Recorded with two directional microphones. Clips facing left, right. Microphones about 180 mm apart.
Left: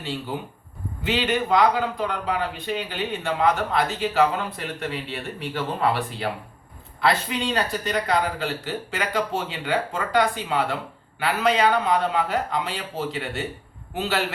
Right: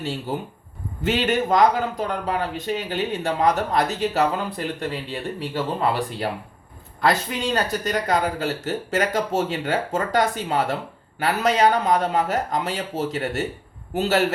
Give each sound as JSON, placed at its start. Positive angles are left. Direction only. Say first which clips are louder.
{"t": 0.0, "sound": "a man's voice", "louder": "right 3 dB", "side_deg": -45}